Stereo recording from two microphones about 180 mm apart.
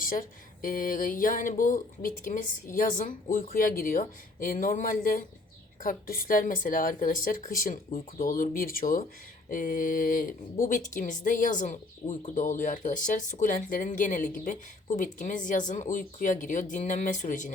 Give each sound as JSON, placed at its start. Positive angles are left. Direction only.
{"t": 0.0, "sound": "speech", "side_deg": 50}